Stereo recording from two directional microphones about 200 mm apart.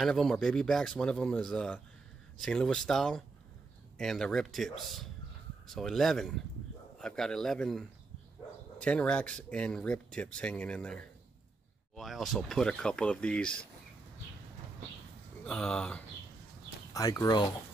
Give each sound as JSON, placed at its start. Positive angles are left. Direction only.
{"t": 0.0, "sound": "speech", "side_deg": 0}
{"t": 15.4, "sound": "speech", "side_deg": 5}
{"t": 16.9, "sound": "speech", "side_deg": 15}